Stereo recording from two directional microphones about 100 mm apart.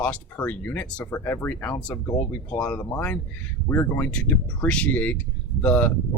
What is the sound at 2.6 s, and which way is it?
Speech, 20° left (ahead or behind).